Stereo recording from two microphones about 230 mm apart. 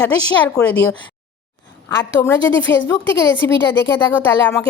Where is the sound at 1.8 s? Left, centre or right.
Centre.